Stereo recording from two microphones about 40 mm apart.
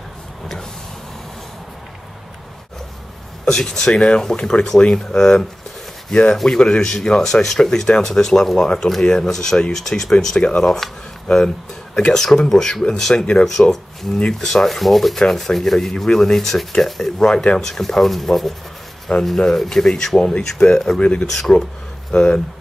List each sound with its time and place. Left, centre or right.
3.4 s speech: centre
10.3 s speech: left
12.1 s speech: centre
17.2 s speech: centre
21.0 s speech: left
21.3 s speech: centre